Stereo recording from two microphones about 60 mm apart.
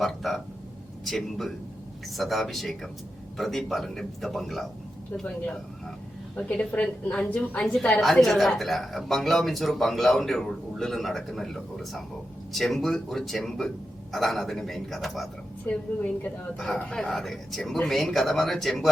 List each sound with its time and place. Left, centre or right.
0.0 s speech: centre
6.3 s a woman's voice: centre
7.6 s speech: centre
15.6 s a woman's voice: left
16.7 s speech: centre